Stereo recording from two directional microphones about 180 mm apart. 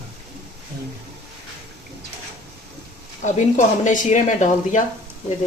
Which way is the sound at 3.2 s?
45° left (ahead or behind).